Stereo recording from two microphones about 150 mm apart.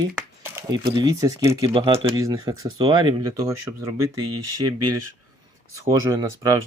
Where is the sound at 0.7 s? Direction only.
25° right (ahead or behind).